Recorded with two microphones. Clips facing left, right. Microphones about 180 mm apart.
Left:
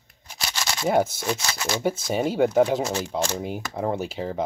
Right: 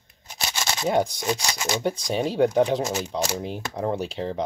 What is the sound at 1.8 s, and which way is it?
Speech, 5° left (ahead or behind).